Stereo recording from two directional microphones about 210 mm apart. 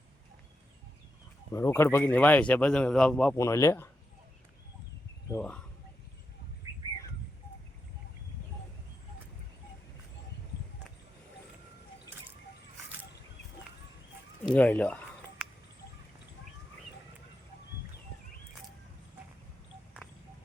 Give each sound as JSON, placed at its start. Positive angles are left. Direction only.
{"t": 1.5, "sound": "speech", "side_deg": 15}
{"t": 3.3, "sound": "speech", "side_deg": 15}
{"t": 5.3, "sound": "speech", "side_deg": 5}
{"t": 6.6, "sound": "bird", "side_deg": -15}
{"t": 14.4, "sound": "speech", "side_deg": 5}